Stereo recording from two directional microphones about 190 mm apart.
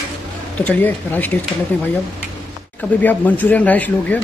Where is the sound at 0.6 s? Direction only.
10° left (ahead or behind).